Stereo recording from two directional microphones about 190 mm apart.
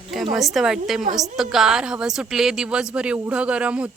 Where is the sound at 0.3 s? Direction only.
Centre (ahead or behind).